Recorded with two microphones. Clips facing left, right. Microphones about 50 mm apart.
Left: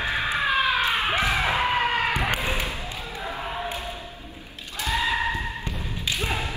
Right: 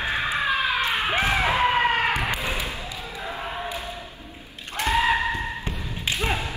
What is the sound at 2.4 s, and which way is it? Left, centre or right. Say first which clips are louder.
Basketball bounce: left 1 dB; left.